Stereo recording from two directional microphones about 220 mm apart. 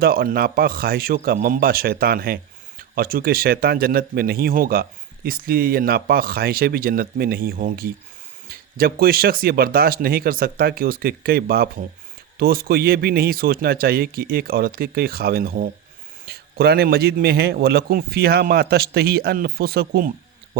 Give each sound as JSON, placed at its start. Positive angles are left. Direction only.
{"t": 0.0, "sound": "speech", "side_deg": -45}